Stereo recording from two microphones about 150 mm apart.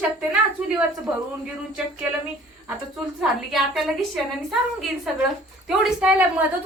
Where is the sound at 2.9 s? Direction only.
Centre (ahead or behind).